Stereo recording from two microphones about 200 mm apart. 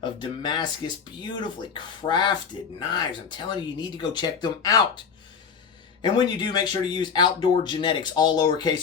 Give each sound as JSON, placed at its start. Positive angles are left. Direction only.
{"t": 0.0, "sound": "speech", "side_deg": 20}
{"t": 6.0, "sound": "speech", "side_deg": 20}